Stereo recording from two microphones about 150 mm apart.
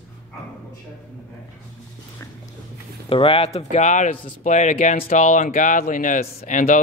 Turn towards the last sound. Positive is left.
turn(degrees=60)  # may be behind; listen again after turning